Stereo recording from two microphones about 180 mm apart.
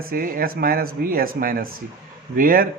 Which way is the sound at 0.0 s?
55° right (ahead or behind).